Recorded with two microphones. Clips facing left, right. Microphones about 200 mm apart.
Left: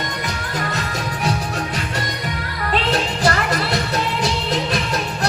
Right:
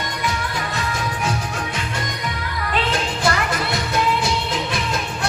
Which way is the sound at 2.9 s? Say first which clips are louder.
Left 2 dB; 35° left (ahead or behind).